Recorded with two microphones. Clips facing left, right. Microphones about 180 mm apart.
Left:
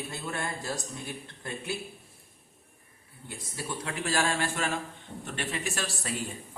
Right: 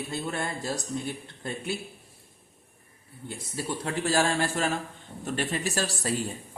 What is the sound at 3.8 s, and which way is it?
Speech, 40° right (ahead or behind).